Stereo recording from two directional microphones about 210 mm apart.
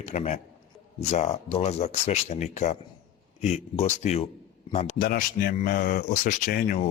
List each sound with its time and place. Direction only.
0.0 s speech: 30° left (ahead or behind)
4.9 s speech: 45° left (ahead or behind)